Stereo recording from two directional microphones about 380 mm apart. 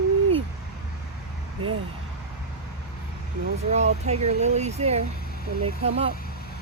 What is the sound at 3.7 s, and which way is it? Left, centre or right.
Speech, centre.